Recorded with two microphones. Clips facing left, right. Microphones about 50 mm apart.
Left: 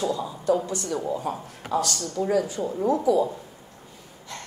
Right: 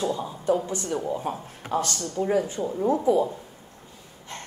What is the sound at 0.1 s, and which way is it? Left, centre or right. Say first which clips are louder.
A woman's voice: left 1 dB; right.